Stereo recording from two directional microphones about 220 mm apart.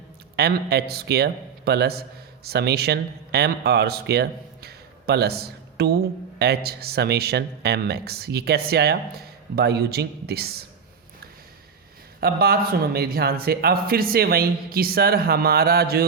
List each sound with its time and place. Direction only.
0.3 s a man's voice: 45° right (ahead or behind)
12.2 s speech: 45° right (ahead or behind)